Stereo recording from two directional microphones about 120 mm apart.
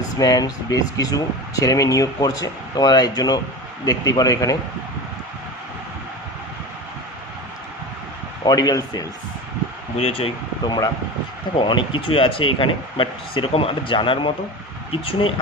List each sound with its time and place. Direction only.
0.2 s speech: 30° left (ahead or behind)
8.4 s speech: 30° left (ahead or behind)
10.0 s speech: 50° left (ahead or behind)
10.7 s speech: 30° left (ahead or behind)